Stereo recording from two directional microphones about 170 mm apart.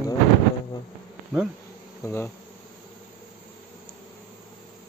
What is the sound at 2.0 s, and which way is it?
Insect, 15° left (ahead or behind).